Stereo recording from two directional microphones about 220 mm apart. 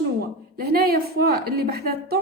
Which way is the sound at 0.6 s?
45° right (ahead or behind).